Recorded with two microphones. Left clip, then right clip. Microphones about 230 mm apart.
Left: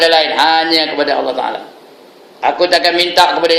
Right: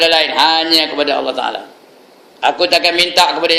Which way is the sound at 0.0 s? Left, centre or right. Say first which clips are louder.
Left 1 dB; centre.